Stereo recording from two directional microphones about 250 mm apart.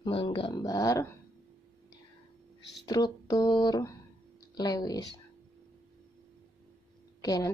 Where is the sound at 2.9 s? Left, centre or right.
Centre.